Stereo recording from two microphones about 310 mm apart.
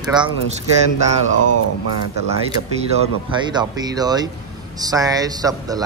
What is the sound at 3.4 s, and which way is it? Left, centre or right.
Speech, centre.